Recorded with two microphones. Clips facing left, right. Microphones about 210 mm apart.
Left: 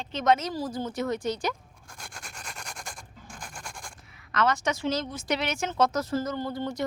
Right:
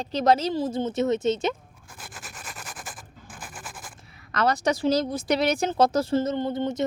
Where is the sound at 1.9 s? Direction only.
5° right (ahead or behind).